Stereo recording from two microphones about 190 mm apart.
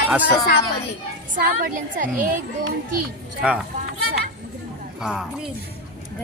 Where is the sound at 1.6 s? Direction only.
45° right (ahead or behind).